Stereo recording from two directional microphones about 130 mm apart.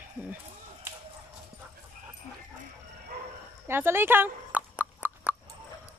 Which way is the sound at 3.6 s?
15° right (ahead or behind).